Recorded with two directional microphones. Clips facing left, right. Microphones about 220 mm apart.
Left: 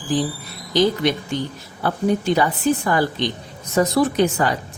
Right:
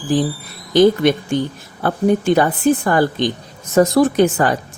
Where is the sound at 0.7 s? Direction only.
50° right (ahead or behind).